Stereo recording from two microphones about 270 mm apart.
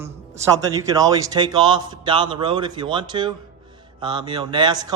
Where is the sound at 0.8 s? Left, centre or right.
Centre.